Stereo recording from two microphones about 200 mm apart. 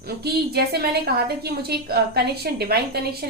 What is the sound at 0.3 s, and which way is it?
A woman's voice, 50° right (ahead or behind).